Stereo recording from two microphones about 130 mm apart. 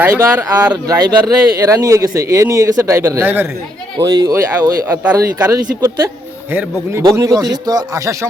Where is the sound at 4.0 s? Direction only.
35° right (ahead or behind).